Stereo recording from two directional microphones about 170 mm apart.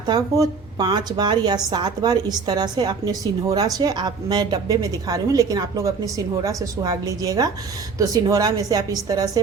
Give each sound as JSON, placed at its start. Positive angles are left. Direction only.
{"t": 0.1, "sound": "a woman's voice", "side_deg": -25}